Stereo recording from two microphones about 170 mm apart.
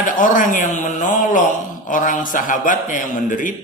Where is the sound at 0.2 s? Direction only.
50° left (ahead or behind).